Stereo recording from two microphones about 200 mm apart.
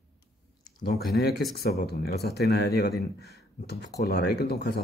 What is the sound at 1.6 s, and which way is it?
Speech, 50° left (ahead or behind).